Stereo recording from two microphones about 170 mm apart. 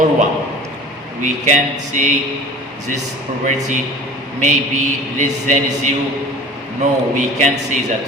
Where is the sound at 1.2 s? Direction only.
45° right (ahead or behind).